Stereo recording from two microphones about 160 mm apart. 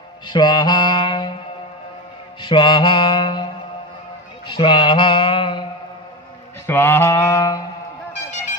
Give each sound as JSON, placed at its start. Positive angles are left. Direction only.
{"t": 0.3, "sound": "mantra", "side_deg": 25}
{"t": 2.4, "sound": "mantra", "side_deg": 30}
{"t": 6.7, "sound": "mantra", "side_deg": 15}